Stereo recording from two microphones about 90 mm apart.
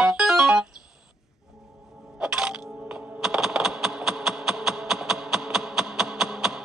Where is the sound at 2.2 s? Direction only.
10° right (ahead or behind).